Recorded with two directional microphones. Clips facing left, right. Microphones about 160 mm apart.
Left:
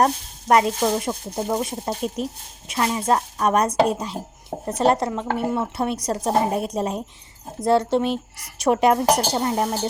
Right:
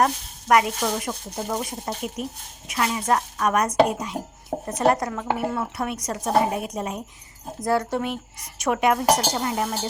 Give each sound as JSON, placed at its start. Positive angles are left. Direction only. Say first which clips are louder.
{"t": 0.0, "sound": "a woman's voice", "louder": "left 2 dB", "side_deg": 30}